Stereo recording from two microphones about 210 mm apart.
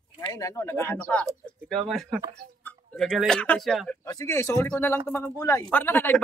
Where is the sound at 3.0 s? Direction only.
Centre (ahead or behind).